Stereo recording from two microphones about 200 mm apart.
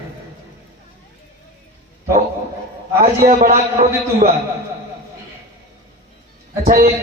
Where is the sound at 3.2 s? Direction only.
35° right (ahead or behind).